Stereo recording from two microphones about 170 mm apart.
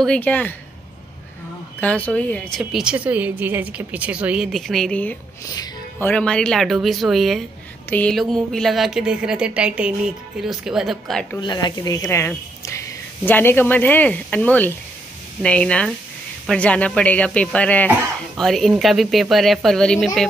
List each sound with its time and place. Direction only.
0.0 s speech: 5° left (ahead or behind)
1.8 s speech: 10° left (ahead or behind)
2.6 s speech: 5° right (ahead or behind)
5.5 s music: 25° left (ahead or behind)
6.0 s speech: 5° left (ahead or behind)
11.4 s speech: 25° left (ahead or behind); by 20.1 s 5° left (ahead or behind)